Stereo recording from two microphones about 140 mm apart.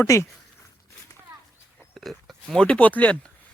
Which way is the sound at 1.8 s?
Centre (ahead or behind).